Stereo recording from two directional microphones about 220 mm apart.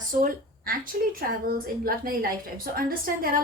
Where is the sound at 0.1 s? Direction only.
40° right (ahead or behind).